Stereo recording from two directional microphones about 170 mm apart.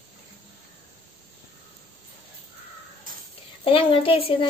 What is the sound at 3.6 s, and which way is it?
Speech, 30° left (ahead or behind).